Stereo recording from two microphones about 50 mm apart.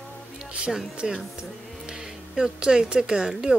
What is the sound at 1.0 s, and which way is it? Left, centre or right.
A woman's voice, centre.